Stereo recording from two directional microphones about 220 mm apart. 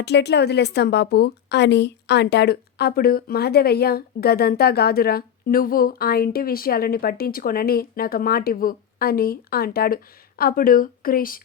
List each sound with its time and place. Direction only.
0.0 s a woman's voice: 50° left (ahead or behind)